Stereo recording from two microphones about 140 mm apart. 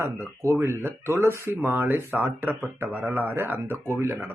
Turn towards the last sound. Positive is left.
turn(degrees=-20)  # may be behind; listen again after turning